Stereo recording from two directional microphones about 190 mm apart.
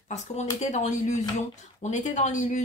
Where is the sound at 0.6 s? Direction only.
40° left (ahead or behind).